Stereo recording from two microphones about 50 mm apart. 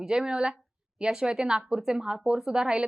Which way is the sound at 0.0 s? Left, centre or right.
Centre.